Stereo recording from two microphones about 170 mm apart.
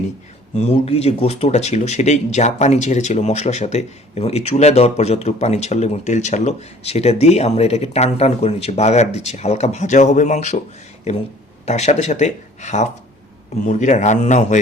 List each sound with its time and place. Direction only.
0.5 s speech: 40° left (ahead or behind)
11.6 s speech: 40° left (ahead or behind)